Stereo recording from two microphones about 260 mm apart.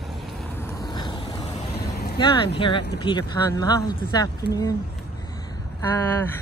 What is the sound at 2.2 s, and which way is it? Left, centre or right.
Speech, centre.